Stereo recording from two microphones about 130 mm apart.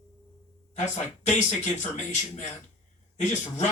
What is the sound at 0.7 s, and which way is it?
Speech, 60° left (ahead or behind).